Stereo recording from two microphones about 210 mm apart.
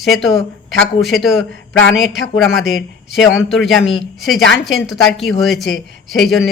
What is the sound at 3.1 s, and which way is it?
Speech, centre (ahead or behind).